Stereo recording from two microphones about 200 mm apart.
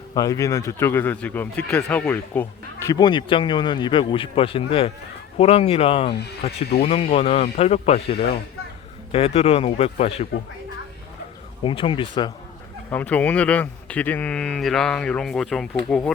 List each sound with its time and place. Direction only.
0.1 s speech: 15° left (ahead or behind)
11.6 s speech: 25° left (ahead or behind)
12.9 s a man's voice: 10° left (ahead or behind)